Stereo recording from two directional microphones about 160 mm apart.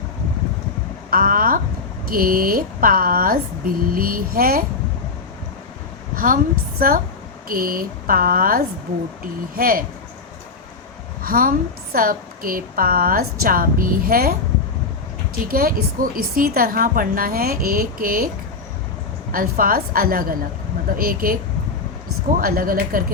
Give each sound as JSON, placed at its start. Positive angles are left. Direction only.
{"t": 1.1, "sound": "a woman's voice", "side_deg": -60}
{"t": 6.1, "sound": "a woman's voice", "side_deg": -60}
{"t": 11.2, "sound": "a woman's voice", "side_deg": -65}
{"t": 15.4, "sound": "a woman's voice", "side_deg": -65}
{"t": 19.3, "sound": "a woman's voice", "side_deg": -65}
{"t": 22.4, "sound": "a woman's voice", "side_deg": -65}